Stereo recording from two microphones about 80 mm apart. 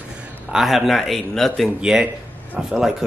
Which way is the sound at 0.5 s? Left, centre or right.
Centre.